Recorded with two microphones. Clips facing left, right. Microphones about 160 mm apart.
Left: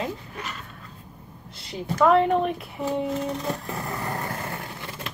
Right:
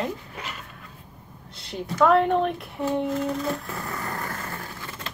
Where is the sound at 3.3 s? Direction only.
20° left (ahead or behind).